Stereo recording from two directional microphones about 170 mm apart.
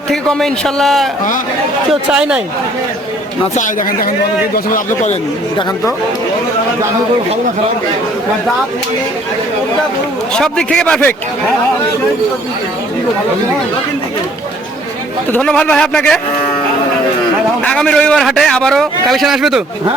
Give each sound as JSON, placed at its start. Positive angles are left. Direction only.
{"t": 0.1, "sound": "a man's voice", "side_deg": 5}
{"t": 3.5, "sound": "speech", "side_deg": 50}
{"t": 10.3, "sound": "a man's voice", "side_deg": 5}
{"t": 15.3, "sound": "a man's voice", "side_deg": 5}
{"t": 17.6, "sound": "a man's voice", "side_deg": 5}